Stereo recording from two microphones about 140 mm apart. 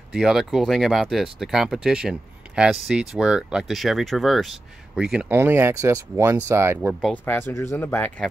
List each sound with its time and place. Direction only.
0.1 s speech: 5° right (ahead or behind)
7.2 s speech: 15° left (ahead or behind)